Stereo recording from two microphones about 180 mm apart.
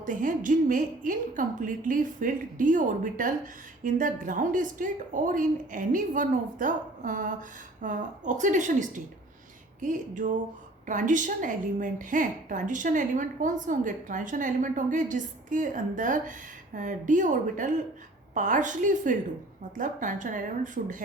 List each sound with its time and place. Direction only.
0.0 s a woman's voice: 45° right (ahead or behind)